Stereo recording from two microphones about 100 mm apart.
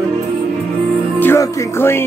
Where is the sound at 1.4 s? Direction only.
30° left (ahead or behind).